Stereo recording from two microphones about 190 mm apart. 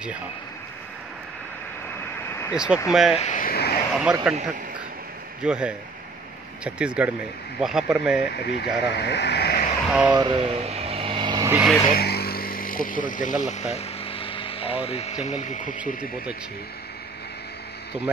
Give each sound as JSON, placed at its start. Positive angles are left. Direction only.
{"t": 2.5, "sound": "speech", "side_deg": -5}
{"t": 3.2, "sound": "speech", "side_deg": 40}
{"t": 3.9, "sound": "speech", "side_deg": -5}
{"t": 5.4, "sound": "speech", "side_deg": -5}
{"t": 8.5, "sound": "speech", "side_deg": 60}
{"t": 9.8, "sound": "speech", "side_deg": -5}
{"t": 10.1, "sound": "vehicle", "side_deg": -25}
{"t": 11.9, "sound": "vehicle", "side_deg": 55}
{"t": 15.2, "sound": "speech", "side_deg": 40}